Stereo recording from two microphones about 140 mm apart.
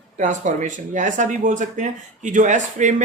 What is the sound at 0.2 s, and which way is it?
Speech, 60° right (ahead or behind).